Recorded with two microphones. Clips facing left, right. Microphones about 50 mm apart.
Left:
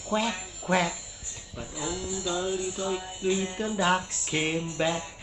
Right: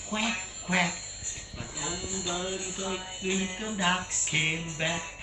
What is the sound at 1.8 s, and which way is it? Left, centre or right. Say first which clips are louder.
Speech: left 3 dB; centre.